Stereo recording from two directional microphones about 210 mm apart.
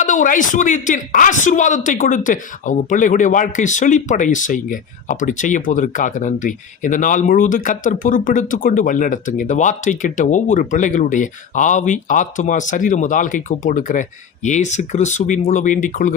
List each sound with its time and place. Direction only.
0.0 s speech: 35° left (ahead or behind)